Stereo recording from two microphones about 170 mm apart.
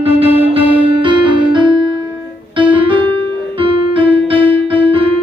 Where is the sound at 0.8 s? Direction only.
30° right (ahead or behind).